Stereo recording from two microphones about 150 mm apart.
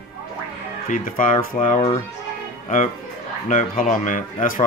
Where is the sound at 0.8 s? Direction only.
65° left (ahead or behind).